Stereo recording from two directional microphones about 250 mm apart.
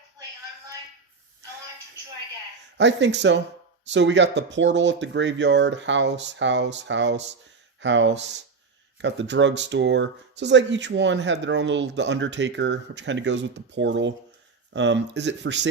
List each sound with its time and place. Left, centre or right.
2.7 s speech: right